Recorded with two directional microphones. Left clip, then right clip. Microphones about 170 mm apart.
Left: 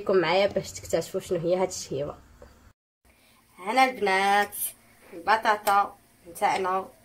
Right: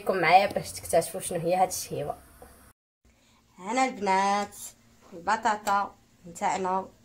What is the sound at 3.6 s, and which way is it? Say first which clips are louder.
Speech: left 5 dB; 30° right (ahead or behind).